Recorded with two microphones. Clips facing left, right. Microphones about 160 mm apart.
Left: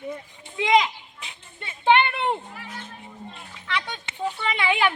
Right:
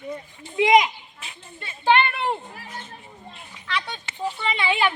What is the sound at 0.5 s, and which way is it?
Speech, 20° right (ahead or behind).